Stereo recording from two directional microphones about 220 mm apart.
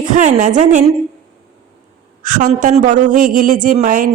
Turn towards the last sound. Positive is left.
turn(degrees=-35)  # may be behind; listen again after turning